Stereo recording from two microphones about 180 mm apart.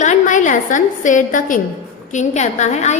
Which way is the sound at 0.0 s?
45° left (ahead or behind).